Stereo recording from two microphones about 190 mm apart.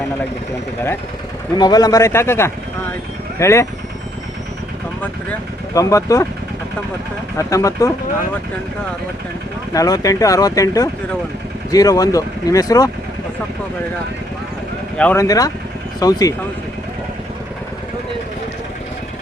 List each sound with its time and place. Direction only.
1.5 s speech: 20° left (ahead or behind)
5.7 s speech: 15° left (ahead or behind)
7.3 s speech: 15° left (ahead or behind)
9.7 s speech: 20° left (ahead or behind)
14.9 s speech: 10° left (ahead or behind)